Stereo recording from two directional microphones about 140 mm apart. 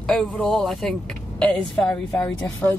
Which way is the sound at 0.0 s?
10° left (ahead or behind).